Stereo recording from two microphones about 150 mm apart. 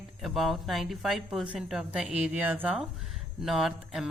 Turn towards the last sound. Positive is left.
turn(degrees=0)  # may be behind; listen again after turning